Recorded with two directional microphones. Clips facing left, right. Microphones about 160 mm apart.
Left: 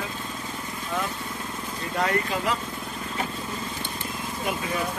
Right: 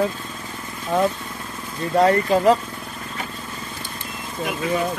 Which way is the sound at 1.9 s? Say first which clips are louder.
Right 10 dB; 40° right (ahead or behind).